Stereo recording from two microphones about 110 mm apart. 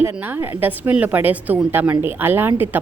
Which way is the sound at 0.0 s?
20° right (ahead or behind).